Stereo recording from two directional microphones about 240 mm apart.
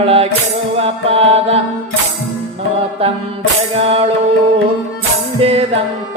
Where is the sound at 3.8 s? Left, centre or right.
Right.